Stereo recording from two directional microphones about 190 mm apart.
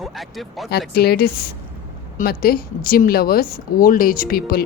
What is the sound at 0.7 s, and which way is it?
Speech, 55° left (ahead or behind).